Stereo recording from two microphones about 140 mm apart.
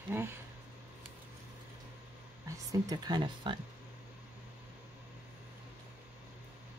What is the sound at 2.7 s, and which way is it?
Speech, 30° right (ahead or behind).